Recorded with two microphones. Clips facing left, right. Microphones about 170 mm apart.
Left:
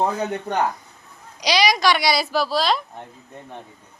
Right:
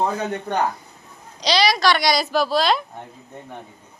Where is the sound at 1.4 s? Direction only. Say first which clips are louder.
Even; 10° left (ahead or behind).